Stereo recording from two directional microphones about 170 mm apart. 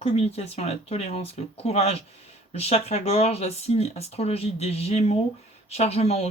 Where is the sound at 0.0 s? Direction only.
35° left (ahead or behind).